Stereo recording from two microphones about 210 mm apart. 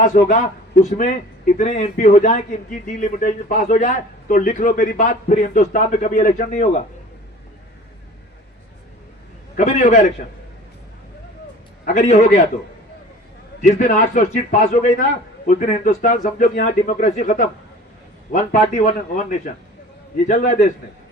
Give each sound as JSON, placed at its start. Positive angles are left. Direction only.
{"t": 0.0, "sound": "a man's voice", "side_deg": 35}
{"t": 9.6, "sound": "a man's voice", "side_deg": 35}
{"t": 11.9, "sound": "a man's voice", "side_deg": 35}
{"t": 13.6, "sound": "a man's voice", "side_deg": 35}